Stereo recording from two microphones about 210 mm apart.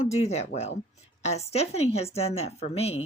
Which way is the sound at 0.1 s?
30° left (ahead or behind).